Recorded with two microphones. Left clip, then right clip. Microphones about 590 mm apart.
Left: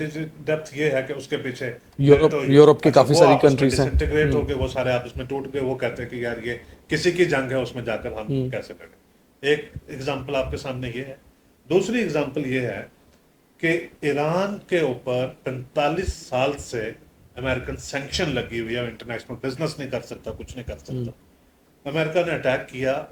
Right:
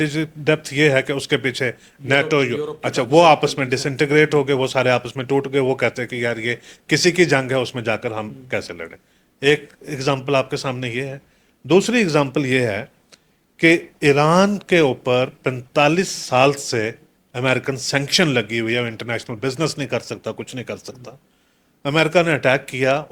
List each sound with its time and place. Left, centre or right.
0.0 s speech: right
3.2 s speech: right
13.6 s speech: right